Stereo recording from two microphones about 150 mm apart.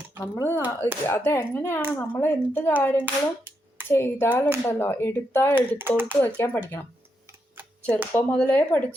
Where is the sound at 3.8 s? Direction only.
15° left (ahead or behind).